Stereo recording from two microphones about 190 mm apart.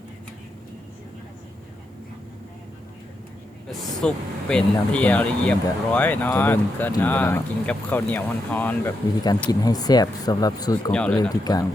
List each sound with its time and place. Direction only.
3.7 s speech: 5° left (ahead or behind)
9.5 s speech: 20° left (ahead or behind)
10.9 s speech: 5° left (ahead or behind)
11.2 s speech: 20° left (ahead or behind)